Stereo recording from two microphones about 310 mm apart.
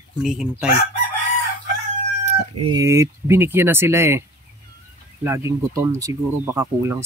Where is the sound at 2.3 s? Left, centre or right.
Centre.